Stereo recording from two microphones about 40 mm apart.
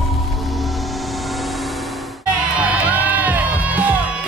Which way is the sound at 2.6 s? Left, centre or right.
Right.